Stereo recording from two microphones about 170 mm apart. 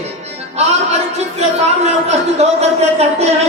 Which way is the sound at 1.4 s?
40° right (ahead or behind).